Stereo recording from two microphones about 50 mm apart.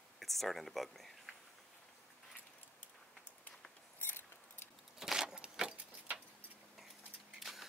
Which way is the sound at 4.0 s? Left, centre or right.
Left.